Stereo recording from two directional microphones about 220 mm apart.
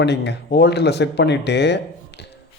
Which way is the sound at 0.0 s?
50° left (ahead or behind).